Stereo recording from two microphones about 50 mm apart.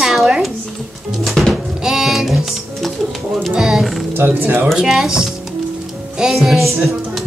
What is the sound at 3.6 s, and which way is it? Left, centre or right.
Speech, centre.